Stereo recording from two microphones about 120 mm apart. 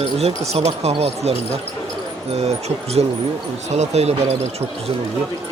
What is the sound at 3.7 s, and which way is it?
Speech, 65° right (ahead or behind).